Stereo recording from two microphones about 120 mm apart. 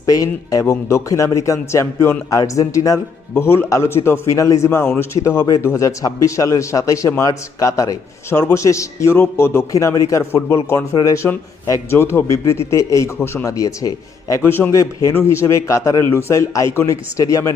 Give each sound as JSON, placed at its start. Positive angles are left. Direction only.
{"t": 0.0, "sound": "a man's voice", "side_deg": 30}